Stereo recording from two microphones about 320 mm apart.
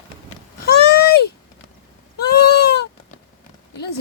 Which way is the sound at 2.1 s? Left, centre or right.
Left.